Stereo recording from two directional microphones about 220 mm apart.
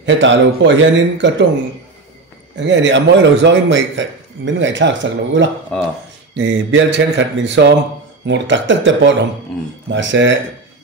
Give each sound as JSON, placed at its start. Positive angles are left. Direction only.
{"t": 0.0, "sound": "a man's voice", "side_deg": -55}
{"t": 2.5, "sound": "a man's voice", "side_deg": -55}
{"t": 5.7, "sound": "speech", "side_deg": 5}
{"t": 6.3, "sound": "a man's voice", "side_deg": -55}
{"t": 9.5, "sound": "speech", "side_deg": 5}
{"t": 9.9, "sound": "a man's voice", "side_deg": -55}